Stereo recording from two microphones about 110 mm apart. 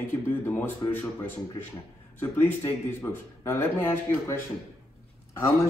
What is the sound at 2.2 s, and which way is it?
A man's voice, 20° left (ahead or behind).